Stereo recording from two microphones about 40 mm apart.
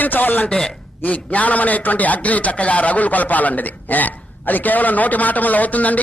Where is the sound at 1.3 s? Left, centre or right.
Left.